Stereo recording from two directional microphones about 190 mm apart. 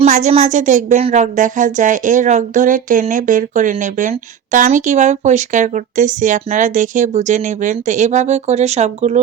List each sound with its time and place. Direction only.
0.0 s speech: 35° right (ahead or behind)